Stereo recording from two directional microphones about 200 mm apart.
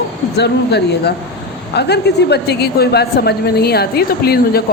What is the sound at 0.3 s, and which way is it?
A woman's voice, 55° left (ahead or behind).